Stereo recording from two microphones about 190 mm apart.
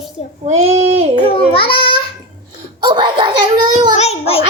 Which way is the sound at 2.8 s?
25° right (ahead or behind).